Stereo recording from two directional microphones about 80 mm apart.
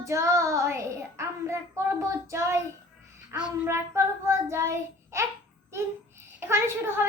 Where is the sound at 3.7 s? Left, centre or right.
Right.